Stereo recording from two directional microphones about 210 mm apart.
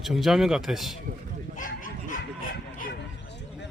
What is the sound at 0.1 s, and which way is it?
Speech, centre (ahead or behind).